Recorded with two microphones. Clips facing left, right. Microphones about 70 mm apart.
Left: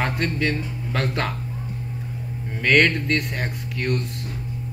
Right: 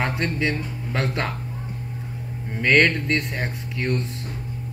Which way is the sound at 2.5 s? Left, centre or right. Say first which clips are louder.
Even; centre.